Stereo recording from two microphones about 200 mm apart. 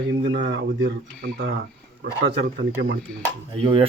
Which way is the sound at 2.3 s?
60° right (ahead or behind).